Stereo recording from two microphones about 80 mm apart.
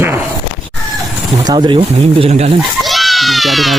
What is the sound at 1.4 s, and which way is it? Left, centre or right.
Speech, right.